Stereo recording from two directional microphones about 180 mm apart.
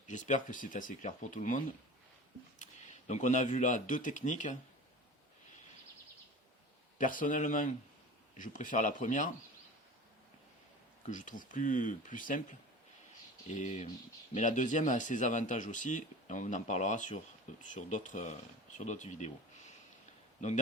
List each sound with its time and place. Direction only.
0.1 s speech: 45° left (ahead or behind)
3.1 s speech: 40° left (ahead or behind)
7.0 s speech: 45° left (ahead or behind)
11.0 s speech: 45° left (ahead or behind)
13.5 s speech: 40° left (ahead or behind)